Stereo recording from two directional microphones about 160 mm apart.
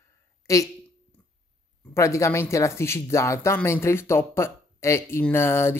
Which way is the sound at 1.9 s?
20° left (ahead or behind).